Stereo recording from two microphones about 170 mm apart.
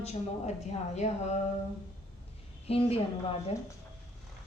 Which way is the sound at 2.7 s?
35° left (ahead or behind).